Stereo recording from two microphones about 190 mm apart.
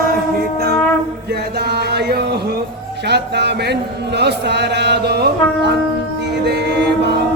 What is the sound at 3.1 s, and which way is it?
Music, 60° right (ahead or behind).